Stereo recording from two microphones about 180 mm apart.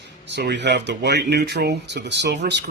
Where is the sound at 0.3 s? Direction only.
75° right (ahead or behind).